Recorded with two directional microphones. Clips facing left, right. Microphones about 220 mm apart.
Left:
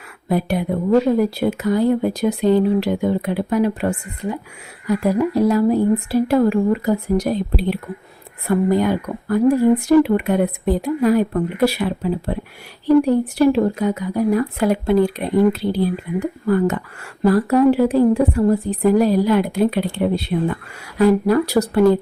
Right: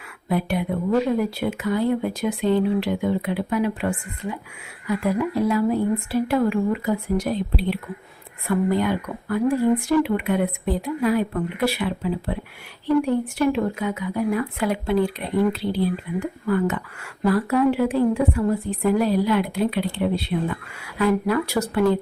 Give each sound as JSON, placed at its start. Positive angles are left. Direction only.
{"t": 0.3, "sound": "a woman's voice", "side_deg": 40}